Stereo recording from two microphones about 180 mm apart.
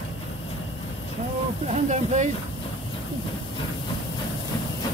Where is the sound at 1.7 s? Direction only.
40° right (ahead or behind).